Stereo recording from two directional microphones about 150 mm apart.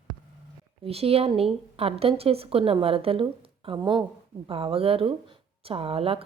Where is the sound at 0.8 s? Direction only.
40° right (ahead or behind).